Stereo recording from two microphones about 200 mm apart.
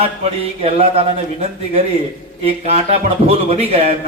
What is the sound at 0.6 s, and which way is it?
Speech, 30° right (ahead or behind).